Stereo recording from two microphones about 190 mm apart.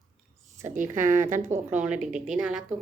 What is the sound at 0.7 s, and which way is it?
Speech, 40° right (ahead or behind).